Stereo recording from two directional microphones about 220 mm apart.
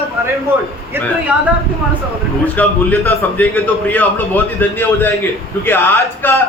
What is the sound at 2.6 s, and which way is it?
A man's voice, 5° left (ahead or behind).